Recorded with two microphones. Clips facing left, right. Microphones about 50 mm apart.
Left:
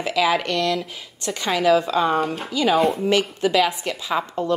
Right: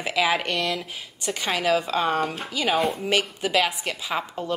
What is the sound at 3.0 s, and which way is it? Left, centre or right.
A woman's voice, centre.